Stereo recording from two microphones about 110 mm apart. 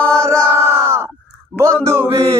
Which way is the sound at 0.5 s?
20° right (ahead or behind).